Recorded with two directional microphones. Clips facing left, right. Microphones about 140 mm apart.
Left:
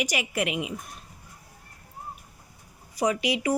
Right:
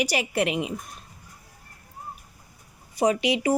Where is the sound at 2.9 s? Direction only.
25° right (ahead or behind).